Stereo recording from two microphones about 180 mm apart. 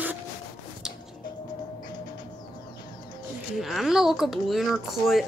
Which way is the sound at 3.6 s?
Centre (ahead or behind).